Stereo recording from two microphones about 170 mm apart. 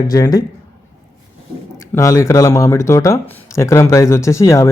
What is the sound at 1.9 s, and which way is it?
Speech, 20° left (ahead or behind).